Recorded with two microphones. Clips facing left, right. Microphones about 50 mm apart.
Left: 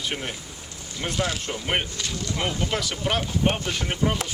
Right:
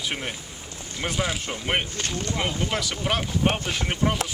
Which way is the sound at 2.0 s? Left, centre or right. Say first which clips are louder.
Right 2 dB; right.